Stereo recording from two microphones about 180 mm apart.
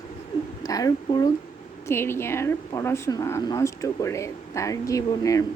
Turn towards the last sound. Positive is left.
turn(degrees=20)  # may be behind; listen again after turning